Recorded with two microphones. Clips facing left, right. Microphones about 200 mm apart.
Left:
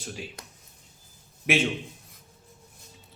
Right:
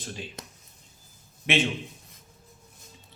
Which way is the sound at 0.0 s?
5° left (ahead or behind).